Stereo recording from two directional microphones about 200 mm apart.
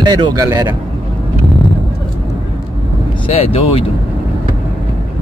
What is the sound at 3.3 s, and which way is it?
Speech, 30° left (ahead or behind).